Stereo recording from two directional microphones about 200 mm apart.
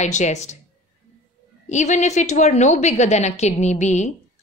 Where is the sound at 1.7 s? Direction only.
35° left (ahead or behind).